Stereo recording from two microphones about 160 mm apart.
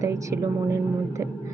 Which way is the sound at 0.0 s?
20° right (ahead or behind).